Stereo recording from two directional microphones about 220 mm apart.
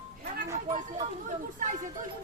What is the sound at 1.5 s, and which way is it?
Speech, 35° right (ahead or behind).